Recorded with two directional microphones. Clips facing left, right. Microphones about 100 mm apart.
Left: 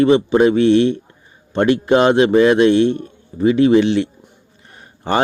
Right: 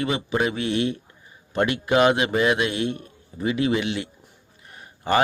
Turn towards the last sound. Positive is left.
turn(degrees=30)  # may be behind; listen again after turning